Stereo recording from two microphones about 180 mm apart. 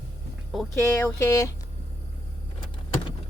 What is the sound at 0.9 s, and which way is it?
Speech, 15° left (ahead or behind).